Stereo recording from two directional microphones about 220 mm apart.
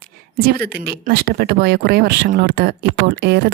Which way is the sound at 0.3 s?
45° right (ahead or behind).